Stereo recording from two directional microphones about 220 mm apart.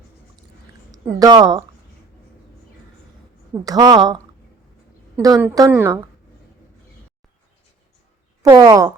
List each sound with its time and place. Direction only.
0.9 s speech: 15° right (ahead or behind)
3.6 s a woman's voice: 15° right (ahead or behind)
8.4 s a woman's voice: 20° right (ahead or behind)